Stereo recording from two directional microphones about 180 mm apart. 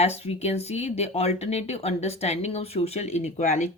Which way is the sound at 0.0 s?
35° left (ahead or behind).